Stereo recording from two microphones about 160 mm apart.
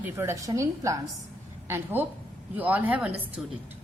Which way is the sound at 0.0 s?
15° right (ahead or behind).